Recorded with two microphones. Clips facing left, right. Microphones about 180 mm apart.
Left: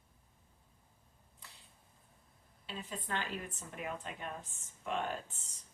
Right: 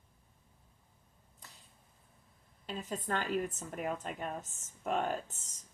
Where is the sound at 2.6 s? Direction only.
45° right (ahead or behind).